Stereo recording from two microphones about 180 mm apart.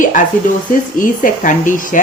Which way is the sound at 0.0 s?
45° left (ahead or behind).